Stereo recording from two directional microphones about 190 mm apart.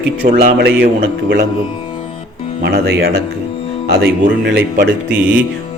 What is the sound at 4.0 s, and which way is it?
Speech, 60° right (ahead or behind).